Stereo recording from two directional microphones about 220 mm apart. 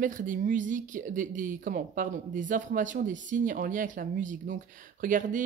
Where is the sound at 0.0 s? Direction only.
35° right (ahead or behind).